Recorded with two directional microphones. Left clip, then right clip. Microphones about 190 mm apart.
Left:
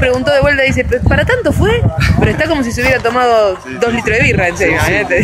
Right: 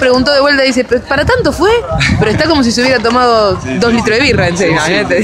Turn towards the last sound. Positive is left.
turn(degrees=-15)  # may be behind; listen again after turning